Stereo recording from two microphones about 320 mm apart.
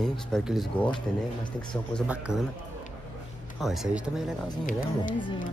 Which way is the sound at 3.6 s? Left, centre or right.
Centre.